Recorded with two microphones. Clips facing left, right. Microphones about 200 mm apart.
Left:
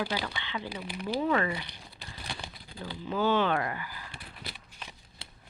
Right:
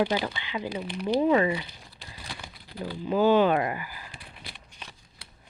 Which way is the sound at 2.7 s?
35° right (ahead or behind).